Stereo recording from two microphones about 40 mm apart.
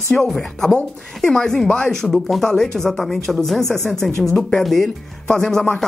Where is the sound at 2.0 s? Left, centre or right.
Centre.